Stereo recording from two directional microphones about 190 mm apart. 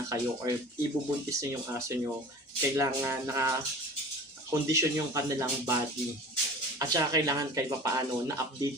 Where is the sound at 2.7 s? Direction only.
15° right (ahead or behind).